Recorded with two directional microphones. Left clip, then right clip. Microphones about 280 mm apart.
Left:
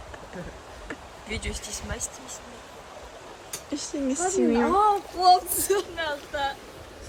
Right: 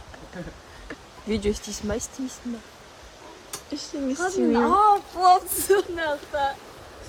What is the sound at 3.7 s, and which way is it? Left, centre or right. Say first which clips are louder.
A woman's voice: left 1 dB; centre.